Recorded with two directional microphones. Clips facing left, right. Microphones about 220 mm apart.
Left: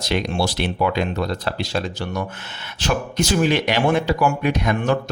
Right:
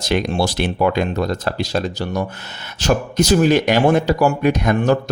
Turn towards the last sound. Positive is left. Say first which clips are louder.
# right 4 dB
turn(degrees=-40)  # may be behind; listen again after turning